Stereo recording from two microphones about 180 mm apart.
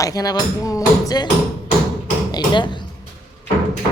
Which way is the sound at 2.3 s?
25° left (ahead or behind).